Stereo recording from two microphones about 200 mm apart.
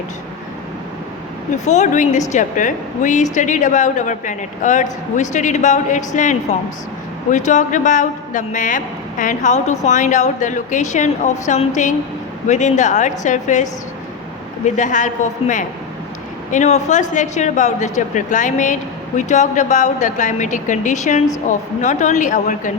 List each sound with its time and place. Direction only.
1.6 s speech: 35° left (ahead or behind)